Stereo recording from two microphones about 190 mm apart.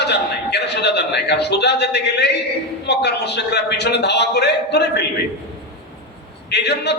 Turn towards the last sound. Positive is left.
turn(degrees=60)  # may be behind; listen again after turning